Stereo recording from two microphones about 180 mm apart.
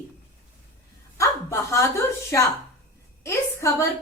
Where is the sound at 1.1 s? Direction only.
15° left (ahead or behind).